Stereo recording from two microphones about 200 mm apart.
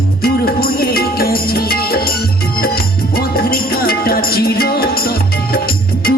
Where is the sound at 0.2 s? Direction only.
50° left (ahead or behind).